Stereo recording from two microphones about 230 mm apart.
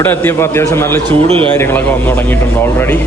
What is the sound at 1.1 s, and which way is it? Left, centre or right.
Speech, right.